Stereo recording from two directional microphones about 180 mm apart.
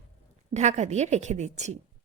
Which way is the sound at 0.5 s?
40° right (ahead or behind).